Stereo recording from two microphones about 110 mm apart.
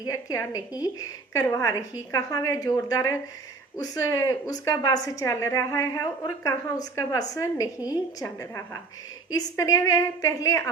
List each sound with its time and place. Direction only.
0.0 s a woman's voice: 30° left (ahead or behind)